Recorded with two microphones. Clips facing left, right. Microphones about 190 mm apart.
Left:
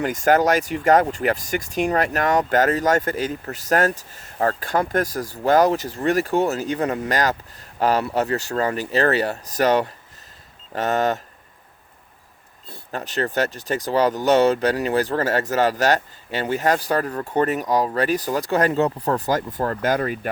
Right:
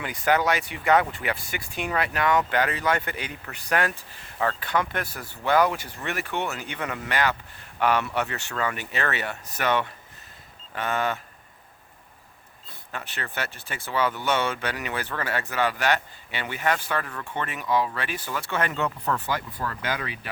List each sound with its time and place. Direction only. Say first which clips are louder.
0.0 s speech: left 6 dB; 45° left (ahead or behind)
12.9 s speech: left 11 dB; 40° left (ahead or behind)